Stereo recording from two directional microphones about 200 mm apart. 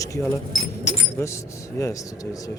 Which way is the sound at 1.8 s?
15° left (ahead or behind).